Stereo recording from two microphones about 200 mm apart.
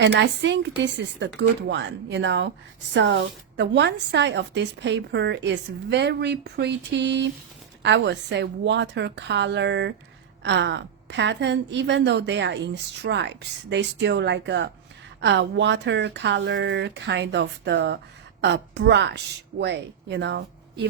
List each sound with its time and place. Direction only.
0.0 s speech: 60° right (ahead or behind)